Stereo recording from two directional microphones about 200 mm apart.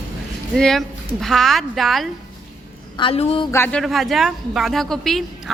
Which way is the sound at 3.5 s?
10° left (ahead or behind).